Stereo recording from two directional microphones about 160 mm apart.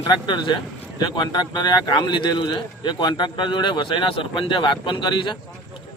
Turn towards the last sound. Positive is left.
turn(degrees=30)  # may be behind; listen again after turning